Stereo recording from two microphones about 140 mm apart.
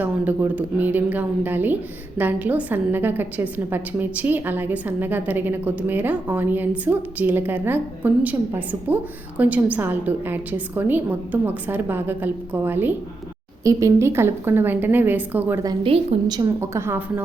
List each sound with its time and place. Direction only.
0.0 s a woman's voice: 10° right (ahead or behind)
15.8 s a woman's voice: 40° right (ahead or behind)
16.3 s a woman's voice: 25° right (ahead or behind)